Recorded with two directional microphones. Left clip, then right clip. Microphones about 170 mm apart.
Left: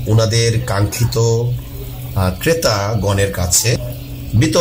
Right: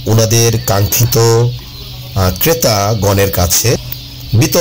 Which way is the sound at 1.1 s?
10° right (ahead or behind).